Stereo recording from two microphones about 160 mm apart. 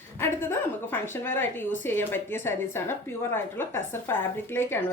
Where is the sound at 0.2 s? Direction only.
15° left (ahead or behind).